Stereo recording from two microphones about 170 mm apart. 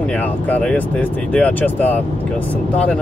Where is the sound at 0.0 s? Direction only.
10° left (ahead or behind).